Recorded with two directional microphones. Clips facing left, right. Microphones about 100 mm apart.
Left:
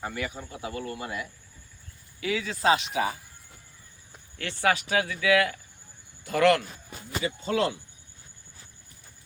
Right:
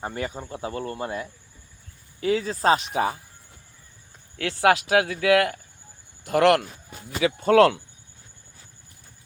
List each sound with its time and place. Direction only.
0.0 s speech: 35° right (ahead or behind)
4.7 s speech: 70° right (ahead or behind)